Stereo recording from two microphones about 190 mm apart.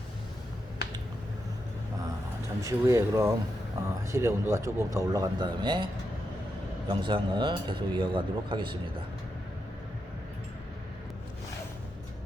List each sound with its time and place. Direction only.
2.6 s speech: 15° right (ahead or behind)